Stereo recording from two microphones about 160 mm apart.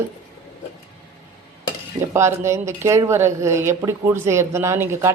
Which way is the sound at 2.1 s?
15° right (ahead or behind).